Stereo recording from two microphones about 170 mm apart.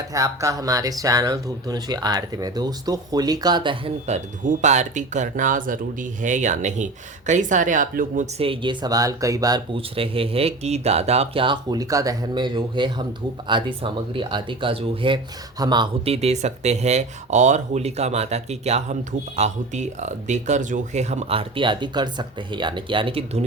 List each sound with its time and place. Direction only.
0.1 s speech: 20° right (ahead or behind)
4.0 s speech: 40° right (ahead or behind)
8.4 s speech: 30° right (ahead or behind)
9.7 s speech: 35° right (ahead or behind)